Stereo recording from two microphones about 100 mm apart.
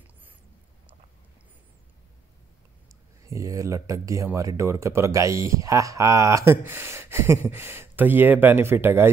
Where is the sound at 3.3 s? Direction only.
30° right (ahead or behind).